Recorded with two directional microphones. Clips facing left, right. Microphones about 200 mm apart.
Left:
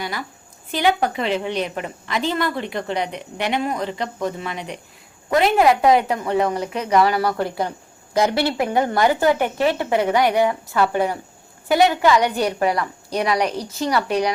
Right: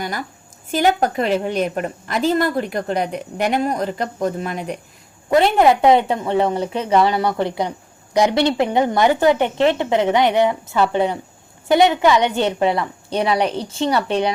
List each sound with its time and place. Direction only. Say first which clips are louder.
0.0 s a woman's voice: right 2 dB; 45° right (ahead or behind)
5.6 s a woman's voice: right 2 dB; 25° right (ahead or behind)